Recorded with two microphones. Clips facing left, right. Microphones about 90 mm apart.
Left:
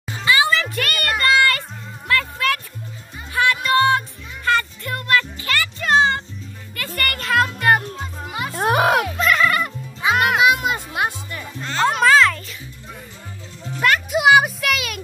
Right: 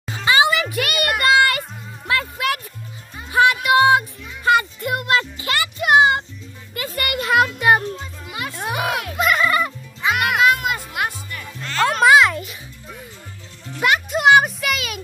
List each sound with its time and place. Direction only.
0.2 s a sound: 20° right (ahead or behind)
1.3 s music: 20° right (ahead or behind)
8.5 s music: 50° left (ahead or behind)
9.1 s music: 10° right (ahead or behind)
10.1 s music: 25° left (ahead or behind)
12.0 s a sound: 15° right (ahead or behind)
13.7 s music: 10° right (ahead or behind)
14.1 s music: 5° left (ahead or behind)